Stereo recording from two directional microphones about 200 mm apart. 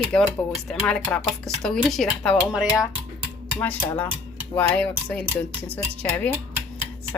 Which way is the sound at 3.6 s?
10° left (ahead or behind).